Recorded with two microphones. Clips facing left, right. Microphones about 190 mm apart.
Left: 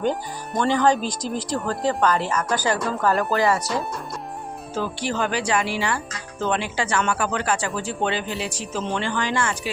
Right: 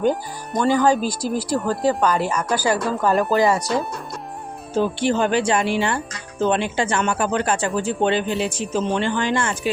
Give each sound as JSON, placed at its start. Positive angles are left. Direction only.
{"t": 0.0, "sound": "speech", "side_deg": -5}
{"t": 4.7, "sound": "speech", "side_deg": -25}